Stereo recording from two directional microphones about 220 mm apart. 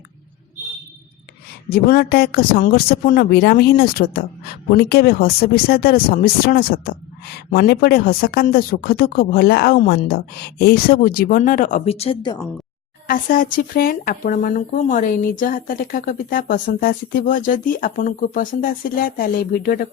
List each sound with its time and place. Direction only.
1.7 s speech: 40° left (ahead or behind); by 12.5 s 20° left (ahead or behind)
13.1 s speech: 40° left (ahead or behind)